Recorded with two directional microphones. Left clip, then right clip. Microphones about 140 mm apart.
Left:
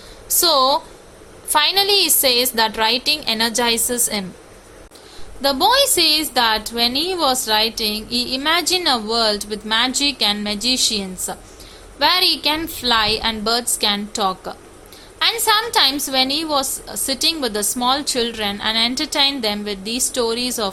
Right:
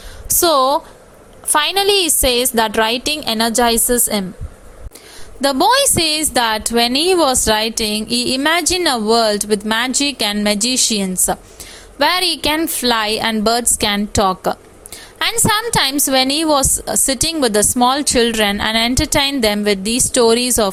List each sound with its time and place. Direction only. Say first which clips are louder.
0.3 s a woman's voice: right 2 dB; 45° right (ahead or behind)
5.4 s a woman's voice: right 2 dB; 65° right (ahead or behind)